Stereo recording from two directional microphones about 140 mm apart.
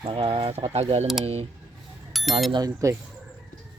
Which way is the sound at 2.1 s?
Centre (ahead or behind).